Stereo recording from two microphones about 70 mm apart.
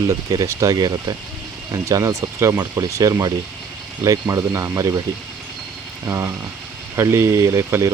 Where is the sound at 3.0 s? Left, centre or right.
Right.